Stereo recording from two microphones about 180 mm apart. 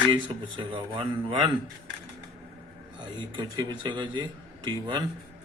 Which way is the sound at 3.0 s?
25° right (ahead or behind).